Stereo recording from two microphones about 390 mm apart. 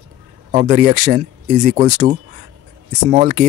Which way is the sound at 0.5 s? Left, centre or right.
Centre.